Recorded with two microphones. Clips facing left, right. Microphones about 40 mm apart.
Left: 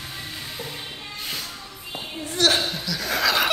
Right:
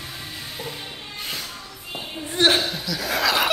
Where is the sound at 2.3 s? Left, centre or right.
Right.